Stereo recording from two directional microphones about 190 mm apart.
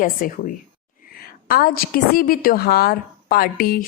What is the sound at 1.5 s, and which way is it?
A woman's voice, 50° left (ahead or behind).